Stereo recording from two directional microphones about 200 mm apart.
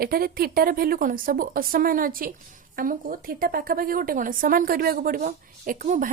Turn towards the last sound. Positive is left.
turn(degrees=-40)  # may be behind; listen again after turning